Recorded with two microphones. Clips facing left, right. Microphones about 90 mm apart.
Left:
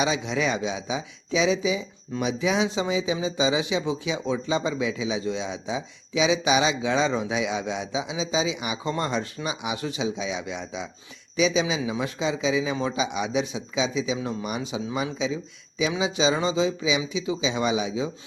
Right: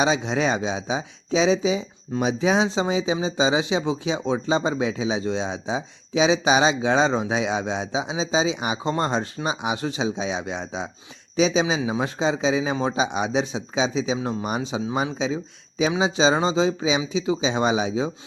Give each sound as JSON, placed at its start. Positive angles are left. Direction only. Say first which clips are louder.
{"t": 0.0, "sound": "speech", "louder": "right 3 dB", "side_deg": -35}